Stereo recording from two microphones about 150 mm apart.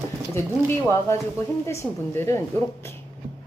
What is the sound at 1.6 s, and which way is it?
Speech, 20° left (ahead or behind).